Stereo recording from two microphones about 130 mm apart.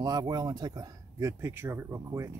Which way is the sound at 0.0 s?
30° right (ahead or behind).